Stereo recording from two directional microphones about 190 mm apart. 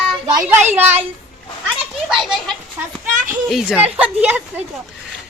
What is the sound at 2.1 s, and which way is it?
A woman's voice, centre (ahead or behind).